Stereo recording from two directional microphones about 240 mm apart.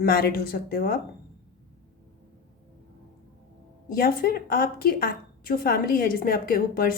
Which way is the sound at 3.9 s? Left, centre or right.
Left.